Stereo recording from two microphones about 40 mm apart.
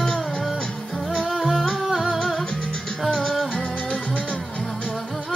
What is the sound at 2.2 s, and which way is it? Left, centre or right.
Music, centre.